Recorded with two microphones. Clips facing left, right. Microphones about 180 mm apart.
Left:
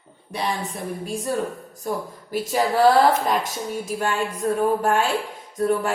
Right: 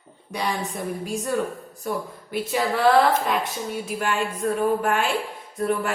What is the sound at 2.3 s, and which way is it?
Speech, 40° left (ahead or behind).